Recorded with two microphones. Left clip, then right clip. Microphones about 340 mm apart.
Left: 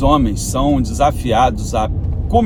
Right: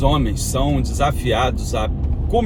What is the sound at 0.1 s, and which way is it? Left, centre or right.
Speech, centre.